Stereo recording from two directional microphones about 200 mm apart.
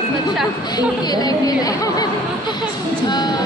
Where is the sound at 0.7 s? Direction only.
20° left (ahead or behind).